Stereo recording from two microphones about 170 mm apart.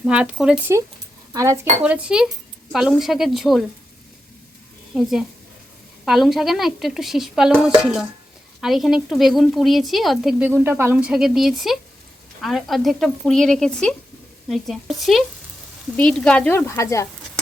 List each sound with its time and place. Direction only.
0.0 s speech: 5° right (ahead or behind)
1.3 s speech: 15° right (ahead or behind); by 3.6 s centre (ahead or behind)
6.1 s speech: centre (ahead or behind)
10.5 s speech: 15° right (ahead or behind); by 17.1 s 15° left (ahead or behind)